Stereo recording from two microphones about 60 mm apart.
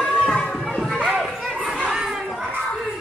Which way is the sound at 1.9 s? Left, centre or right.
Centre.